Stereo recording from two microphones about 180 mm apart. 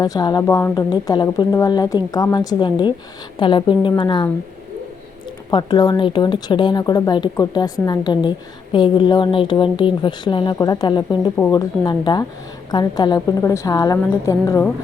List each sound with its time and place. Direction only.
0.0 s speech: 20° left (ahead or behind)
5.5 s speech: 25° left (ahead or behind)